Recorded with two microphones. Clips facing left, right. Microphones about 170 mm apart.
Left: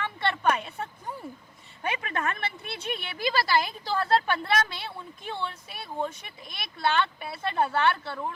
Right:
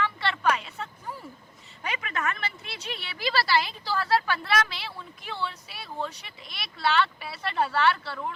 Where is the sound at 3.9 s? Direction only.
25° left (ahead or behind).